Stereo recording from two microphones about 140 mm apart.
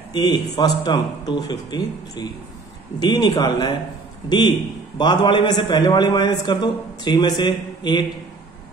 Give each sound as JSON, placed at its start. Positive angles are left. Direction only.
{"t": 0.1, "sound": "a man's voice", "side_deg": 30}
{"t": 4.9, "sound": "a man's voice", "side_deg": 30}